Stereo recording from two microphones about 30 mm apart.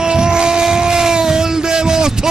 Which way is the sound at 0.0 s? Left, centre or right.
Right.